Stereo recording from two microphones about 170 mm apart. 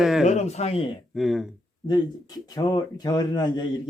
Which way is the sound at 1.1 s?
Centre (ahead or behind).